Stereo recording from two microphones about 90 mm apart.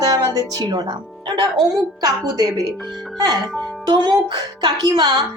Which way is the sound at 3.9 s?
50° right (ahead or behind).